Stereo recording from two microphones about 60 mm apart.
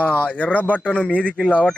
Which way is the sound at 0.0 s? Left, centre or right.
Left.